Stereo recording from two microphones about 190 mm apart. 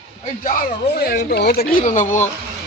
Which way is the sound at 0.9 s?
55° left (ahead or behind).